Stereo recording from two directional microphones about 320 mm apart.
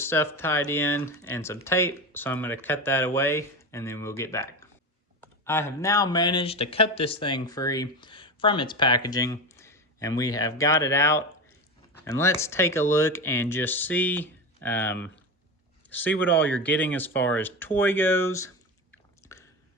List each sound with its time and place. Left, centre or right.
0.0 s speech: centre